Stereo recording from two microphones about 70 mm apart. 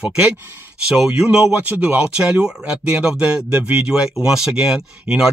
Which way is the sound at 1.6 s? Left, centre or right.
Right.